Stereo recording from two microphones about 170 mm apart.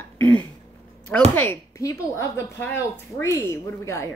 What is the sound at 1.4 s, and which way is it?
A woman's voice, 15° left (ahead or behind).